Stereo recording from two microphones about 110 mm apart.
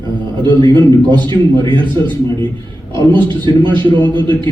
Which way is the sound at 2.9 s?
45° right (ahead or behind).